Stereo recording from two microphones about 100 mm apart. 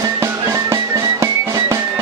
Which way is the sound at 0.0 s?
30° right (ahead or behind).